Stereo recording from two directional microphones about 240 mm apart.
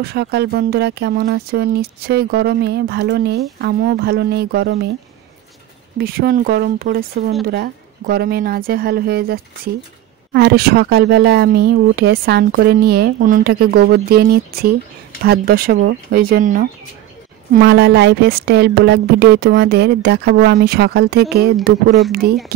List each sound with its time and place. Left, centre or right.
0.0 s speech: right
5.9 s a woman's voice: right